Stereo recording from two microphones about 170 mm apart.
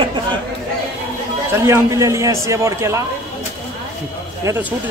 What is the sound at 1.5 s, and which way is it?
Speech, 15° right (ahead or behind).